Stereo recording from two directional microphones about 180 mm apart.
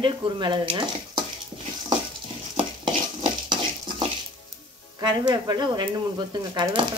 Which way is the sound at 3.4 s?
25° right (ahead or behind).